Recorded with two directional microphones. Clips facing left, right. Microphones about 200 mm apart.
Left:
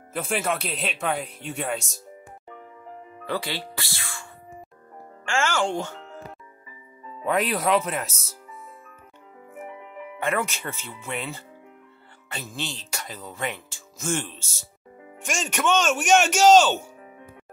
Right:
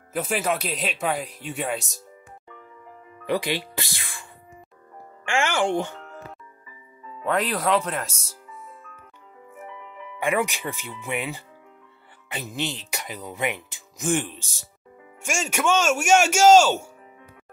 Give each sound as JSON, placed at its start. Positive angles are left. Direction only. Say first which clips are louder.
{"t": 0.1, "sound": "speech", "louder": "right 2 dB", "side_deg": 0}
{"t": 3.3, "sound": "speech", "louder": "right 5 dB", "side_deg": -15}
{"t": 7.2, "sound": "speech", "louder": "even", "side_deg": 10}
{"t": 10.2, "sound": "speech", "louder": "right 3 dB", "side_deg": -15}